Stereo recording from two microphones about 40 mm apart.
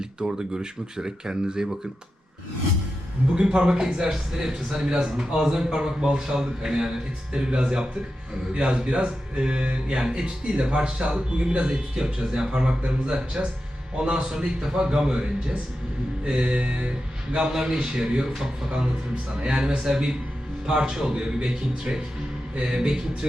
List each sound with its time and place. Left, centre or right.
0.0 s a man's voice: centre
3.3 s a man's voice: right
16.2 s a man's voice: right
17.5 s a man's voice: centre
19.4 s a man's voice: right